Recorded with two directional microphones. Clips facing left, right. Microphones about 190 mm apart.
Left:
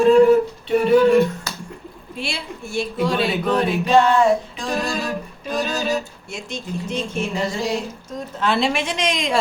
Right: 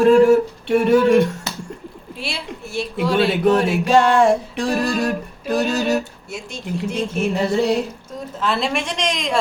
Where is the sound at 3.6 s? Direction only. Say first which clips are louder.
Right 1 dB; 85° right; by 5.9 s 65° right (ahead or behind).